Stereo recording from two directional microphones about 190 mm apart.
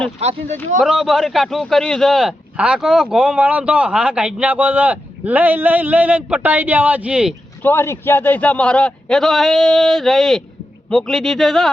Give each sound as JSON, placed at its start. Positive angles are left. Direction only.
{"t": 0.2, "sound": "speech", "side_deg": -35}
{"t": 0.8, "sound": "speech", "side_deg": 0}
{"t": 7.6, "sound": "speech", "side_deg": 10}